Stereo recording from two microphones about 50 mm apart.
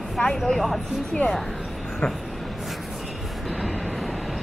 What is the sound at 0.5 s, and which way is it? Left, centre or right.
Speech, centre.